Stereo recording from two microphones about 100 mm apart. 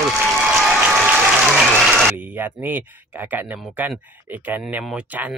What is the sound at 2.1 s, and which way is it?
Speech, 20° right (ahead or behind).